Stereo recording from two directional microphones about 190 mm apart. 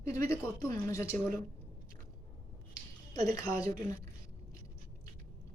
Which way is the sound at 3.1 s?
20° left (ahead or behind).